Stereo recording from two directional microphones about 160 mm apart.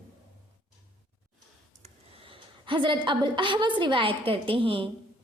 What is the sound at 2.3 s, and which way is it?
A woman's voice, 30° right (ahead or behind).